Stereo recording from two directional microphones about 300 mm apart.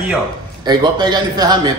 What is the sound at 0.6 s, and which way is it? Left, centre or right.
Speech, centre.